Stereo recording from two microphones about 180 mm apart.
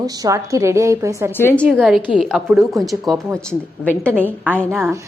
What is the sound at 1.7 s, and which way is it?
A woman's voice, centre (ahead or behind).